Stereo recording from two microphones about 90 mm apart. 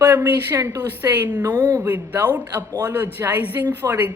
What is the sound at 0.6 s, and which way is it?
Speech, 40° right (ahead or behind).